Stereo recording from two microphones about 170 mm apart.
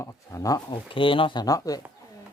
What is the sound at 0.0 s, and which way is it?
Speech, 20° left (ahead or behind).